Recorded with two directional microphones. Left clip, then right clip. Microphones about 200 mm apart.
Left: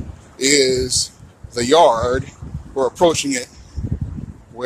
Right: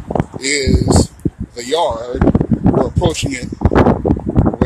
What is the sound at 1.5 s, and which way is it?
Speech, 30° left (ahead or behind).